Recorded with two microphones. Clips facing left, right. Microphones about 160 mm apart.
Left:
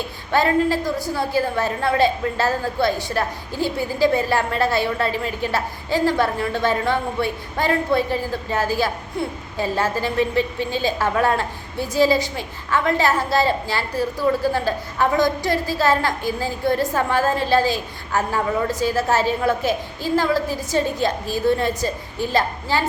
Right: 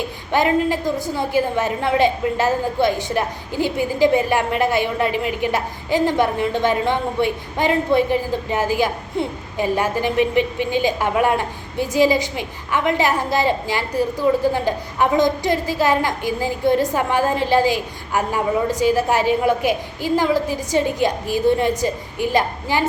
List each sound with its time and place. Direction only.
0.3 s a woman's voice: 15° right (ahead or behind)